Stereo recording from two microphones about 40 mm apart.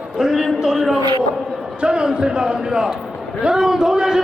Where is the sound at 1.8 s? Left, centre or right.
Right.